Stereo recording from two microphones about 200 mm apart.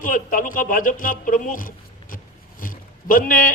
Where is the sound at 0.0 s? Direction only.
40° left (ahead or behind).